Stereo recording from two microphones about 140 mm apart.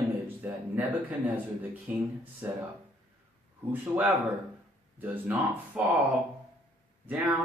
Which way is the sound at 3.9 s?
10° right (ahead or behind).